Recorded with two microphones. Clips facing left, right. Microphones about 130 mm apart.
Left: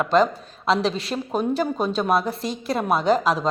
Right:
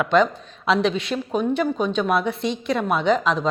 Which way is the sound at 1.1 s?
40° left (ahead or behind).